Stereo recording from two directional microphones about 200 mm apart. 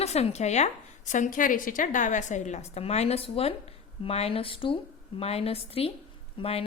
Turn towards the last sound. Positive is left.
turn(degrees=30)  # may be behind; listen again after turning